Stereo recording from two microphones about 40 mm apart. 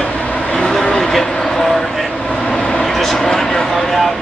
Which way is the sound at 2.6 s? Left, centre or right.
Centre.